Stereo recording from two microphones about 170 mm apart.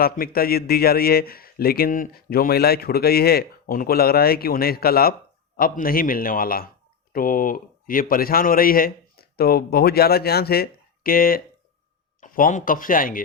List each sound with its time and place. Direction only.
0.0 s a man's voice: 60° left (ahead or behind)